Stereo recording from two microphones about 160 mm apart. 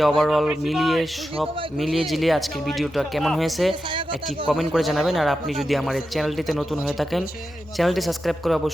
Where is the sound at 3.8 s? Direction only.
30° right (ahead or behind).